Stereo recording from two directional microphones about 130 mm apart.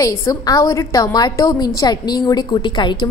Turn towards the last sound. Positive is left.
turn(degrees=35)  # may be behind; listen again after turning